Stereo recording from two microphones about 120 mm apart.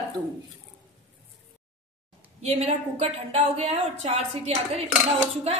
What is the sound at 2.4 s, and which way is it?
A woman's voice, 60° right (ahead or behind).